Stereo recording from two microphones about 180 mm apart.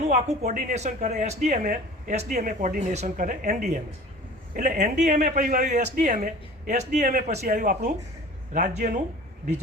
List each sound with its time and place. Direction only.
0.0 s speech: 40° right (ahead or behind)